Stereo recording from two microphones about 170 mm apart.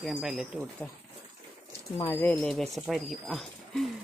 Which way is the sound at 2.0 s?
15° left (ahead or behind).